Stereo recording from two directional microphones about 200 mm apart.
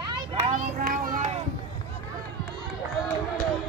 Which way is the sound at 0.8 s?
45° right (ahead or behind).